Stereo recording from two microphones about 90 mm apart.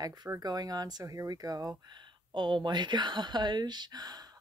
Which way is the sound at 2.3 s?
60° right (ahead or behind).